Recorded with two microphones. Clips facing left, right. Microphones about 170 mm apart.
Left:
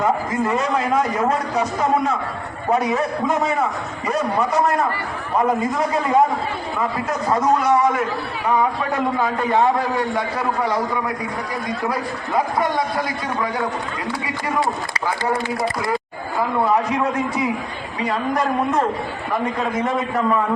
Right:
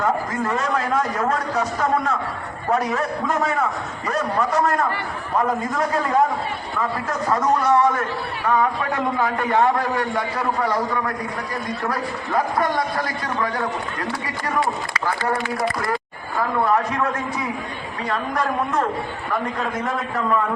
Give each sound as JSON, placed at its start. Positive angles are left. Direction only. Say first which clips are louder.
{"t": 0.0, "sound": "a man's voice", "louder": "left 2 dB", "side_deg": 10}
{"t": 7.3, "sound": "a man's voice", "louder": "left 1 dB", "side_deg": 10}
{"t": 11.9, "sound": "a man's voice", "louder": "left 1 dB", "side_deg": 10}
{"t": 16.4, "sound": "a man's voice", "louder": "left 1 dB", "side_deg": 15}